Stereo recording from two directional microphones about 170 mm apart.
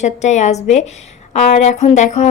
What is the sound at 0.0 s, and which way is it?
A woman's voice, 45° left (ahead or behind).